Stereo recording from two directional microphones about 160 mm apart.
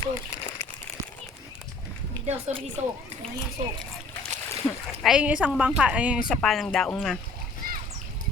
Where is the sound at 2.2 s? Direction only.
35° right (ahead or behind).